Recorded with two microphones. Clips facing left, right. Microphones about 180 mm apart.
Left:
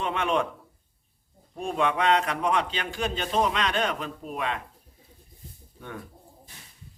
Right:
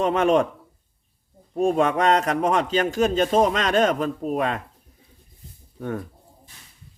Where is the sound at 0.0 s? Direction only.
40° right (ahead or behind).